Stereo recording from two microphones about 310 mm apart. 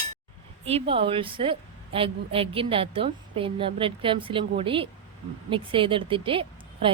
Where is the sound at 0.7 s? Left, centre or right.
Centre.